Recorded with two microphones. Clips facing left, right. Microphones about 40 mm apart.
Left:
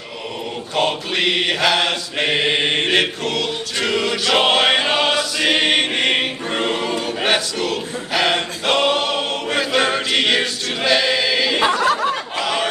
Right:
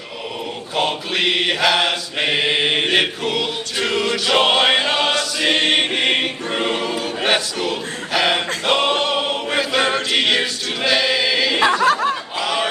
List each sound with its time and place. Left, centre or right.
0.7 s mantra: centre
6.8 s choir: centre
11.8 s snicker: right
12.4 s battle cry: centre